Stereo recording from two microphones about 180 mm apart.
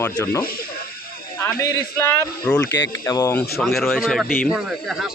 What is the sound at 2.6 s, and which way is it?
Speech, 90° left.